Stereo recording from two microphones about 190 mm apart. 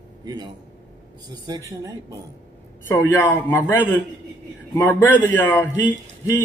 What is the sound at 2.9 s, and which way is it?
A man's voice, 20° left (ahead or behind).